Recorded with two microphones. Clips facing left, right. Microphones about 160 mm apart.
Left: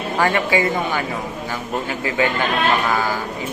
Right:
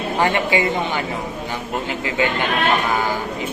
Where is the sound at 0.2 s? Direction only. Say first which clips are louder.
Left 1 dB; 20° right (ahead or behind).